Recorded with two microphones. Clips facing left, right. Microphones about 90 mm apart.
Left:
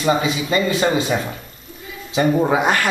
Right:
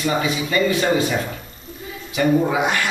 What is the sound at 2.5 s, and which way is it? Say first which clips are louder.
Speech: left 3 dB; 45° left (ahead or behind).